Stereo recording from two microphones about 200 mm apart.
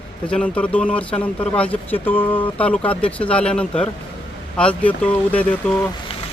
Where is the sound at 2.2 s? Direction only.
25° left (ahead or behind).